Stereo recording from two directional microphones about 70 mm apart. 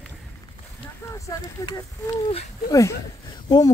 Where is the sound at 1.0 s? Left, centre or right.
Left.